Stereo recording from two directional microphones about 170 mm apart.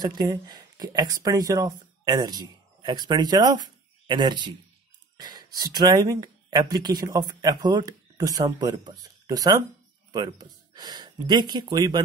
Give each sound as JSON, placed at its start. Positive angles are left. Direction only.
{"t": 0.0, "sound": "speech", "side_deg": -25}